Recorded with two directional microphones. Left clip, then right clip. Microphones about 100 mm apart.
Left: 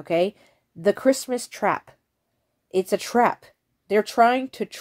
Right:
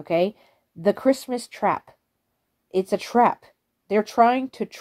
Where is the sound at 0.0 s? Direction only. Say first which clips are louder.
Even; 30° left (ahead or behind).